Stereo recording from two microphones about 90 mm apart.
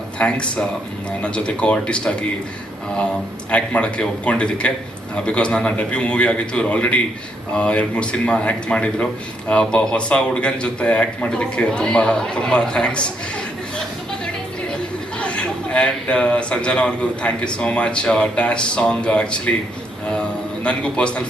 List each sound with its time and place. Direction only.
0.2 s a man's voice: 10° left (ahead or behind)
3.5 s a man's voice: 15° left (ahead or behind)
15.2 s a man's voice: 15° left (ahead or behind)
20.7 s a man's voice: 10° left (ahead or behind)